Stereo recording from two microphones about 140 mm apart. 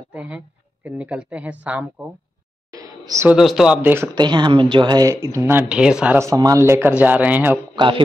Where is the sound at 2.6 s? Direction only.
25° right (ahead or behind).